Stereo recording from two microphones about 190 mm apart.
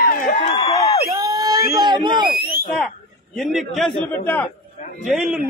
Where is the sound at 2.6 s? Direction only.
Centre (ahead or behind).